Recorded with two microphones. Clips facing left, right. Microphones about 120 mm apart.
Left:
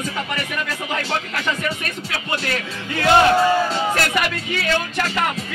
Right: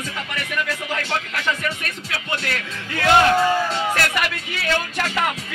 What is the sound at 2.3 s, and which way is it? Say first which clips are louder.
A man's voice: left 3 dB; 30° left (ahead or behind).